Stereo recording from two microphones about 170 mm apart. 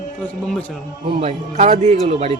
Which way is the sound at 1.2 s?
40° right (ahead or behind).